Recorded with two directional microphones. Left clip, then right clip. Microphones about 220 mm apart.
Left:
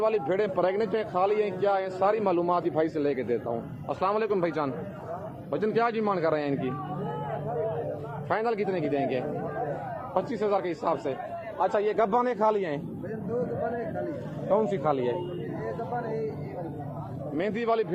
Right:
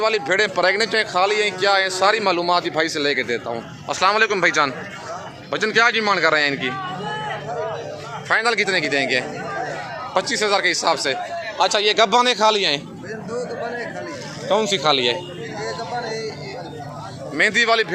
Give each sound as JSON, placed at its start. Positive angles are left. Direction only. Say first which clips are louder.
{"t": 0.0, "sound": "a man's voice", "louder": "right 7 dB", "side_deg": -15}
{"t": 8.3, "sound": "a man's voice", "louder": "right 9 dB", "side_deg": -15}
{"t": 11.6, "sound": "a man's voice", "louder": "right 8 dB", "side_deg": -35}
{"t": 14.5, "sound": "a man's voice", "louder": "right 8 dB", "side_deg": -30}
{"t": 17.3, "sound": "a man's voice", "louder": "right 11 dB", "side_deg": -15}